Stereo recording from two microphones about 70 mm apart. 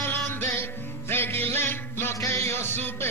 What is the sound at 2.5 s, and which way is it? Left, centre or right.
Music, left.